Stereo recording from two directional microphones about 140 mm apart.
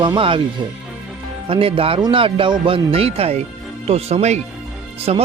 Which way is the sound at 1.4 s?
40° right (ahead or behind).